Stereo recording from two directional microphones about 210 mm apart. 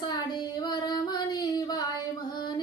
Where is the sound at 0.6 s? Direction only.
20° left (ahead or behind).